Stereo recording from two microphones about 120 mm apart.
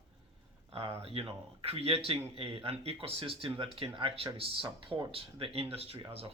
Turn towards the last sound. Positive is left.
turn(degrees=-50)  # may be behind; listen again after turning